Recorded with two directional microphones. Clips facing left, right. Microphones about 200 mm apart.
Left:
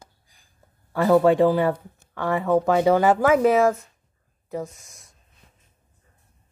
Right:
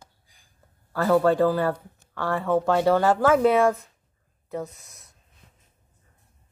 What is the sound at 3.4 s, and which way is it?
Speech, 5° left (ahead or behind).